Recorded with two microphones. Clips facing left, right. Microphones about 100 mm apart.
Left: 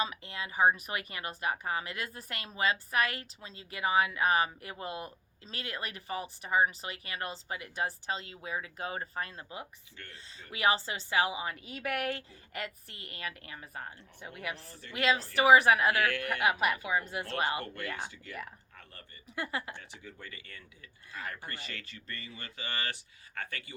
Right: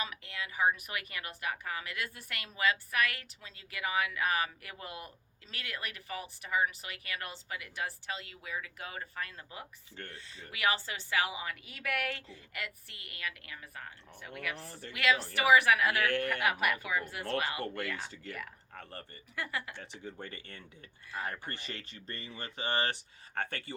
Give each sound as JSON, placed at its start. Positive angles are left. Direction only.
{"t": 0.0, "sound": "speech", "side_deg": 30}
{"t": 10.0, "sound": "a woman's voice", "side_deg": -40}
{"t": 10.5, "sound": "a woman's voice", "side_deg": 30}
{"t": 14.6, "sound": "a woman's voice", "side_deg": -35}
{"t": 14.9, "sound": "a woman's voice", "side_deg": 30}
{"t": 18.8, "sound": "a woman's voice", "side_deg": -35}
{"t": 19.4, "sound": "speech", "side_deg": 30}
{"t": 19.8, "sound": "speech", "side_deg": -30}